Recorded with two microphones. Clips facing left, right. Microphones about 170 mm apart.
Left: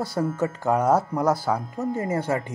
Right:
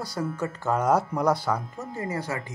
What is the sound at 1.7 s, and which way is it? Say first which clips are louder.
Speech: left 6 dB; 20° left (ahead or behind).